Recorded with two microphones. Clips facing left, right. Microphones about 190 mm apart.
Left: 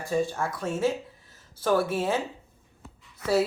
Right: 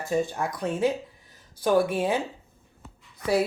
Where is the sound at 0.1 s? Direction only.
15° right (ahead or behind).